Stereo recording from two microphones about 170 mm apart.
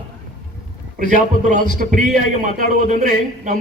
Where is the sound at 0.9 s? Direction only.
50° right (ahead or behind).